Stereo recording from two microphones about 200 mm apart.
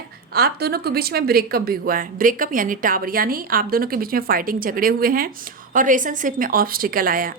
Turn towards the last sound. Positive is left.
turn(degrees=-45)  # may be behind; listen again after turning